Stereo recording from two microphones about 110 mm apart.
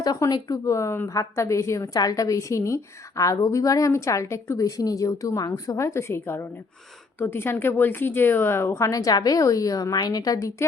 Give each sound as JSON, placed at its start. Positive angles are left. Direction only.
{"t": 0.0, "sound": "a woman's voice", "side_deg": 35}